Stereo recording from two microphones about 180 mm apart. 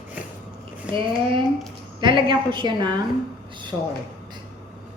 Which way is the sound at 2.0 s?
25° right (ahead or behind).